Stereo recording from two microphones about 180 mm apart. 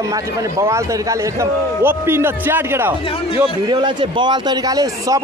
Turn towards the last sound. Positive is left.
turn(degrees=-20)  # may be behind; listen again after turning